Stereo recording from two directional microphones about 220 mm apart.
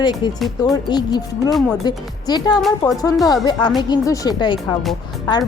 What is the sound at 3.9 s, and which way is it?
Speech, 20° left (ahead or behind).